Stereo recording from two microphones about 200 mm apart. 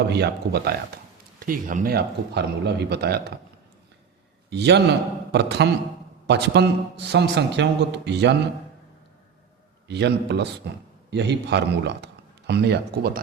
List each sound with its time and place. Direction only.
0.1 s a man's voice: 55° right (ahead or behind)
1.4 s a man's voice: 45° right (ahead or behind)
4.4 s a man's voice: 55° right (ahead or behind)
9.9 s a man's voice: 55° right (ahead or behind)